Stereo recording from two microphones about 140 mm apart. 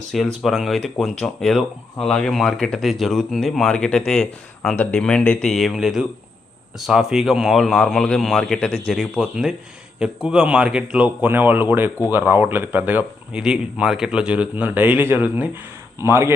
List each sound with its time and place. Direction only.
0.1 s speech: centre (ahead or behind); by 16.3 s 20° right (ahead or behind)